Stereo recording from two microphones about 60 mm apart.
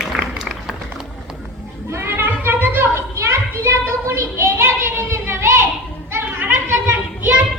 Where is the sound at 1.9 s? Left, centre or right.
Right.